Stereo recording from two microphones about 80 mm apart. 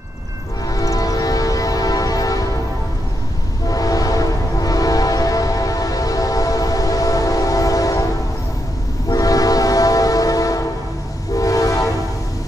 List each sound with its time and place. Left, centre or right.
0.7 s music: left
3.6 s train: left
9.1 s train: left